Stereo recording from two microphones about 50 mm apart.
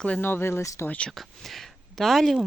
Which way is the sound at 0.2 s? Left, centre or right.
Left.